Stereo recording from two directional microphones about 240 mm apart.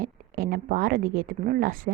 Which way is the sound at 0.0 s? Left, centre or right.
Right.